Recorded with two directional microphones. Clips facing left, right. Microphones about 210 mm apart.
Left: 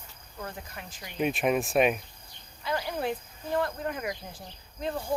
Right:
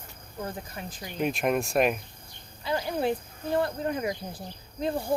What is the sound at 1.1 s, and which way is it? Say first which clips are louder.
Speech: even; centre (ahead or behind).